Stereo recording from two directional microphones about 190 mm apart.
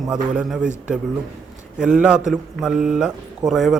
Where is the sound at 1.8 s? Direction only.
5° right (ahead or behind).